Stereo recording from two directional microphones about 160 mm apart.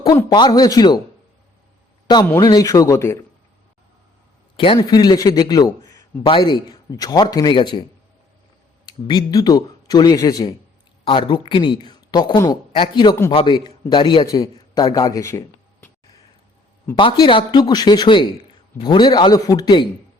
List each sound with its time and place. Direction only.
0.0 s a man's voice: 25° left (ahead or behind)
2.3 s a man's voice: 20° left (ahead or behind)
4.5 s a man's voice: 30° left (ahead or behind)
8.9 s a man's voice: 25° left (ahead or behind)
16.9 s a man's voice: 30° left (ahead or behind)